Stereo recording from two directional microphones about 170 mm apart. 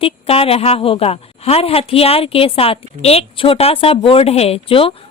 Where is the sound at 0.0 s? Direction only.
35° left (ahead or behind).